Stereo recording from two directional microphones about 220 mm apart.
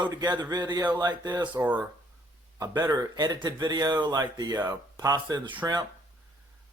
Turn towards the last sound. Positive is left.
turn(degrees=-15)  # may be behind; listen again after turning